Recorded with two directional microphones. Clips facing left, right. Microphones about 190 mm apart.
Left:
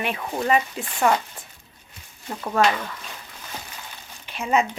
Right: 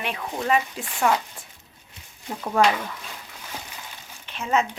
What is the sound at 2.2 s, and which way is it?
Speech, 5° right (ahead or behind).